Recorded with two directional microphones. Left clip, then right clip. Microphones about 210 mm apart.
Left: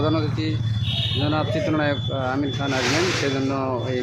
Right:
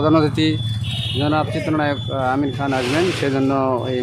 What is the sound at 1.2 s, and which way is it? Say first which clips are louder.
Speech: right 6 dB; 15° right (ahead or behind).